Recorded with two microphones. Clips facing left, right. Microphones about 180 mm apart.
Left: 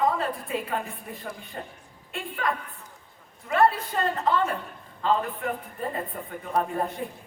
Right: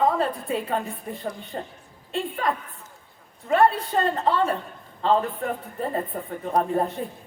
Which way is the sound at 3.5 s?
30° right (ahead or behind).